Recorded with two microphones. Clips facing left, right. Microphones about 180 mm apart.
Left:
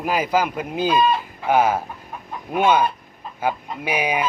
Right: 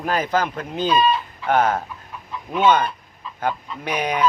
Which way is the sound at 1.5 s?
10° left (ahead or behind).